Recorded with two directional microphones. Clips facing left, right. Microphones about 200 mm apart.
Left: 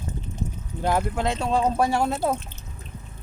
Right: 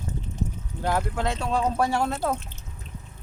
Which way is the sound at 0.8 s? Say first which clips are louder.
Left 2 dB; 20° left (ahead or behind).